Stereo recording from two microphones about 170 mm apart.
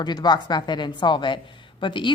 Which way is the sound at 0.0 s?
25° left (ahead or behind).